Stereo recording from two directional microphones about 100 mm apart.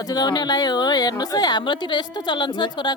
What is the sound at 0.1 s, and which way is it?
A woman's voice, 40° left (ahead or behind).